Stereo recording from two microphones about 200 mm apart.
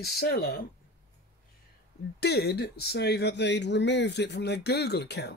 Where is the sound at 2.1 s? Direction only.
55° left (ahead or behind).